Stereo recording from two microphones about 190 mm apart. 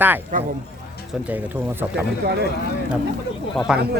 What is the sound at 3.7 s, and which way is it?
Speech, 5° right (ahead or behind).